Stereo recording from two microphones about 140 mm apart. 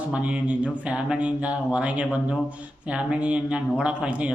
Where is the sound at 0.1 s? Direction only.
10° right (ahead or behind).